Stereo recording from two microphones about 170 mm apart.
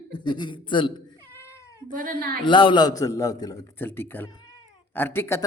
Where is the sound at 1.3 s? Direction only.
15° left (ahead or behind).